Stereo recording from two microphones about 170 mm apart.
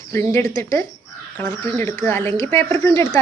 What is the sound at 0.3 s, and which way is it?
A woman's voice, 15° left (ahead or behind).